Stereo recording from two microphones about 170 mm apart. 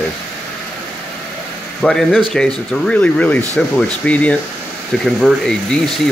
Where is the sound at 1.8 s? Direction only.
5° left (ahead or behind).